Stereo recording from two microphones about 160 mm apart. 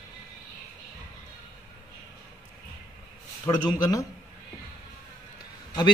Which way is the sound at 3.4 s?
20° left (ahead or behind).